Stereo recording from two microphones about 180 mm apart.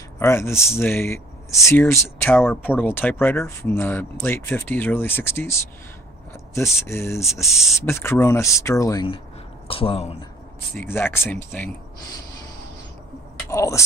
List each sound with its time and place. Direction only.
0.2 s speech: 15° left (ahead or behind); by 10.2 s 30° left (ahead or behind)
10.8 s speech: 10° left (ahead or behind)
13.5 s speech: 15° left (ahead or behind)